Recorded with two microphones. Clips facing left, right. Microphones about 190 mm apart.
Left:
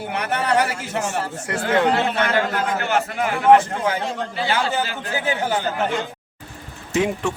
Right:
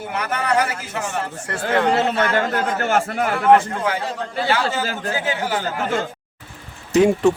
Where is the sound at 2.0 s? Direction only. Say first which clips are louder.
Right 1 dB; 40° right (ahead or behind).